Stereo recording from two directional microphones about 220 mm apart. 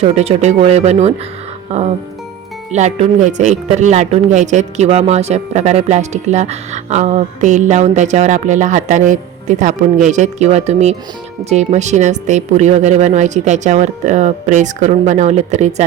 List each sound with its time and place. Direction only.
0.0 s speech: 30° right (ahead or behind)
2.7 s speech: 30° right (ahead or behind)